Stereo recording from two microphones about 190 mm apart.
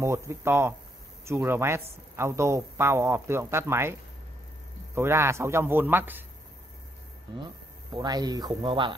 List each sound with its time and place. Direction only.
0.0 s speech: 15° right (ahead or behind)
4.9 s speech: 15° right (ahead or behind)
7.4 s speech: 20° right (ahead or behind)